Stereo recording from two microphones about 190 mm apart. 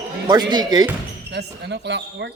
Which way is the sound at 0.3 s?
20° right (ahead or behind).